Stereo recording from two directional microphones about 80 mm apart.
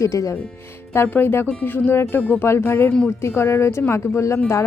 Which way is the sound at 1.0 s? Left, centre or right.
Left.